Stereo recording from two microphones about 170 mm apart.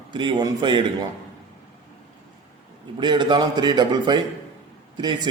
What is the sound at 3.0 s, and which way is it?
A man's voice, 25° right (ahead or behind).